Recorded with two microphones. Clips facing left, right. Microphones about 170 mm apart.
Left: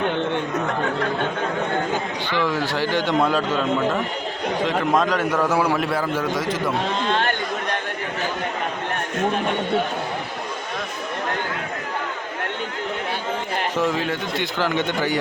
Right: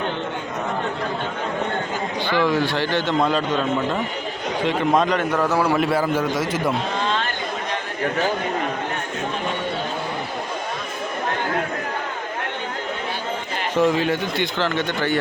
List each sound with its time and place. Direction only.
2.5 s a man's voice: 10° left (ahead or behind)
4.9 s a man's voice: centre (ahead or behind)
7.1 s a sound: 60° left (ahead or behind)
13.7 s a man's voice: centre (ahead or behind)
14.6 s a man's voice: 15° left (ahead or behind)